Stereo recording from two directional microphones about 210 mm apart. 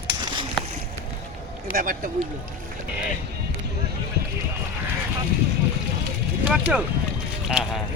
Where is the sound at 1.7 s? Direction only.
40° right (ahead or behind).